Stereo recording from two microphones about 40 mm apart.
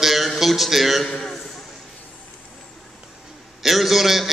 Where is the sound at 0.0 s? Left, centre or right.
Centre.